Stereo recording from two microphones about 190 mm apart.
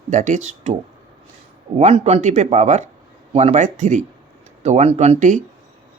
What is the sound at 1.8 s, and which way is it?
Speech, 35° right (ahead or behind).